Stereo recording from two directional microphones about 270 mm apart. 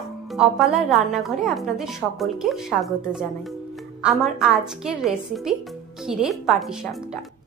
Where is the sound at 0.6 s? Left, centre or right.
Centre.